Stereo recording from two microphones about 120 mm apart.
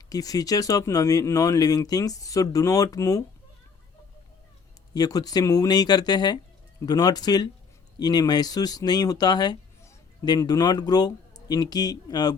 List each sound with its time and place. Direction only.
0.1 s speech: 30° left (ahead or behind)
4.9 s speech: 30° left (ahead or behind)